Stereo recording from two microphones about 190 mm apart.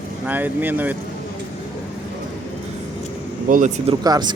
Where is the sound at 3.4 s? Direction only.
45° right (ahead or behind).